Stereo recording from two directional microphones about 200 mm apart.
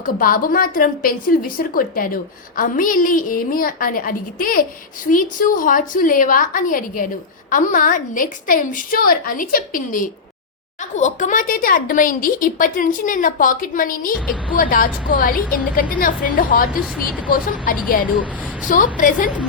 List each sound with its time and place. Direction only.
0.0 s a woman's voice: 45° left (ahead or behind)